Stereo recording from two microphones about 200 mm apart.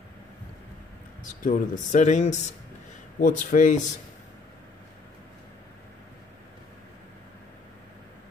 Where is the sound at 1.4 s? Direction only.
40° left (ahead or behind).